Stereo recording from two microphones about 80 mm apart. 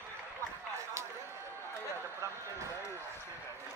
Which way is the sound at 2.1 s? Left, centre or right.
Right.